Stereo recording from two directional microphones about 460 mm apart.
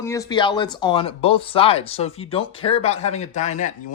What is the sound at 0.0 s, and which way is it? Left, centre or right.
Speech, centre.